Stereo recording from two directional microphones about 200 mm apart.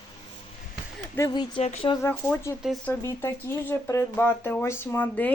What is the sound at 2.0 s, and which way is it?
Speech, 10° left (ahead or behind).